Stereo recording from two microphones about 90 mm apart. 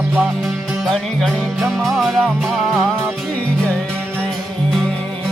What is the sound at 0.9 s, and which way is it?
Music, centre (ahead or behind).